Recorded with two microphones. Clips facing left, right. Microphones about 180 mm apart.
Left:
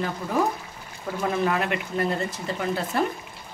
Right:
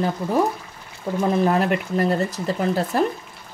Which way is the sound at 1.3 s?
35° right (ahead or behind).